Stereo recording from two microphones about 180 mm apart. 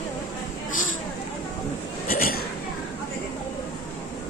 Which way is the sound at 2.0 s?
55° left (ahead or behind).